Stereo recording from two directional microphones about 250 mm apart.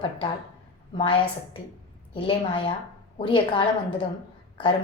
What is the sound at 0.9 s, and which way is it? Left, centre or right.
A woman's voice, centre.